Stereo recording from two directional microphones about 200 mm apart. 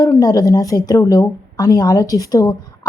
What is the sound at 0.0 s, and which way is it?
A woman's voice, 20° left (ahead or behind).